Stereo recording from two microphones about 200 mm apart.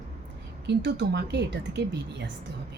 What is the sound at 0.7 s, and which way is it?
A woman's voice, 60° right (ahead or behind).